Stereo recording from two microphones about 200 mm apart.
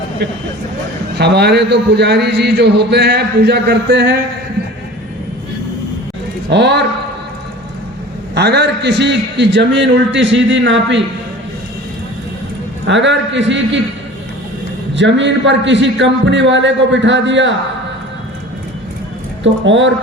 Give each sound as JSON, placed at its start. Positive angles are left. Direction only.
{"t": 1.2, "sound": "a man's voice", "side_deg": -55}
{"t": 6.5, "sound": "a man's voice", "side_deg": -60}
{"t": 8.4, "sound": "a man's voice", "side_deg": -55}
{"t": 12.8, "sound": "a man's voice", "side_deg": -65}
{"t": 14.9, "sound": "a man's voice", "side_deg": -65}
{"t": 19.4, "sound": "speech", "side_deg": -65}